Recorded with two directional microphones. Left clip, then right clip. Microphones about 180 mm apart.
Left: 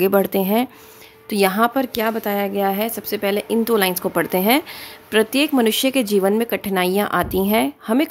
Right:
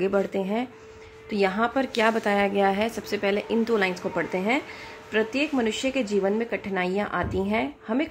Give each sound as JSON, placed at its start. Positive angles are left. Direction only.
{"t": 0.0, "sound": "a woman's voice", "side_deg": 45}